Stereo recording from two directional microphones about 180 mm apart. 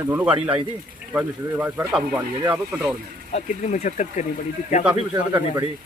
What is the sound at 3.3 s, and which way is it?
Speech, 40° left (ahead or behind).